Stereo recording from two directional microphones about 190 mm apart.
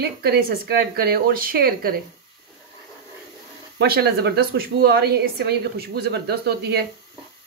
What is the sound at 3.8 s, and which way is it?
Speech, 60° right (ahead or behind).